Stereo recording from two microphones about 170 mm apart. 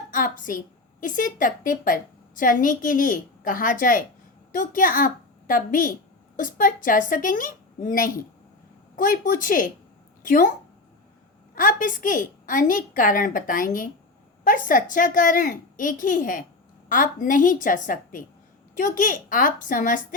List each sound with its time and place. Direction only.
0.1 s a woman's voice: 50° left (ahead or behind)
11.5 s a woman's voice: 55° left (ahead or behind)